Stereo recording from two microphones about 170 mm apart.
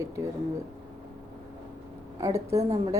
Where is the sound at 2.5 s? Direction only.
20° right (ahead or behind).